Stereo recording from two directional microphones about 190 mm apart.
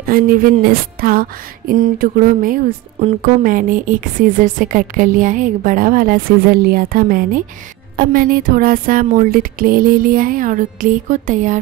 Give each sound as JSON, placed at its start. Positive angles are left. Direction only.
{"t": 0.0, "sound": "speech", "side_deg": -50}